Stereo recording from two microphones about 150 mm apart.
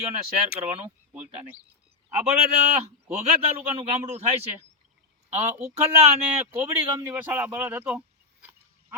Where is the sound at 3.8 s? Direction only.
45° right (ahead or behind).